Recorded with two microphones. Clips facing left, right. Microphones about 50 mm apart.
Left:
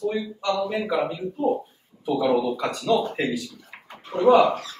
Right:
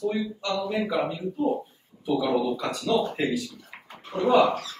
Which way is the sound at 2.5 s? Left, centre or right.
Left.